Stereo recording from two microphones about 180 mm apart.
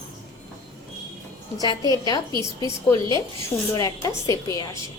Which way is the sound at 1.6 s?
20° left (ahead or behind).